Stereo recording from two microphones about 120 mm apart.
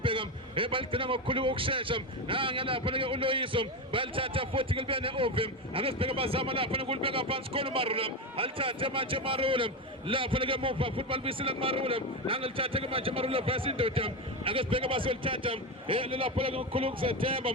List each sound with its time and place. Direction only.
0.0 s a man's voice: 45° right (ahead or behind)